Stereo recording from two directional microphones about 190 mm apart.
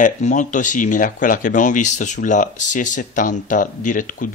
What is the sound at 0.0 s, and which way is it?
Speech, 40° left (ahead or behind).